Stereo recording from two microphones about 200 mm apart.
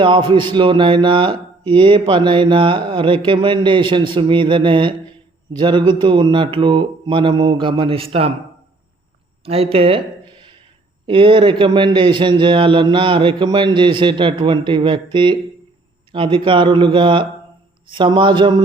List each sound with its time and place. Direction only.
0.0 s a man's voice: 25° right (ahead or behind)
9.4 s a sound: 30° right (ahead or behind)
11.0 s a man's voice: 25° right (ahead or behind)